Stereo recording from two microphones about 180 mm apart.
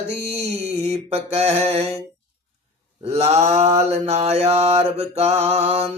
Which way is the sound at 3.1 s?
35° right (ahead or behind).